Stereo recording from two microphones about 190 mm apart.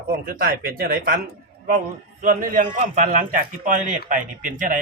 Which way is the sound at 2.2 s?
45° right (ahead or behind).